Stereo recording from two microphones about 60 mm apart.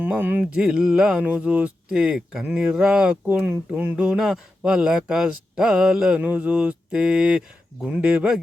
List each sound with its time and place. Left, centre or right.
0.0 s a sound: right
0.5 s speech: centre
3.2 s speech: right
3.9 s speech: centre
6.1 s speech: right